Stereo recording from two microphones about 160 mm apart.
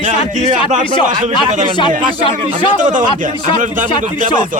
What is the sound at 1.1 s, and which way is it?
Speech, 45° right (ahead or behind).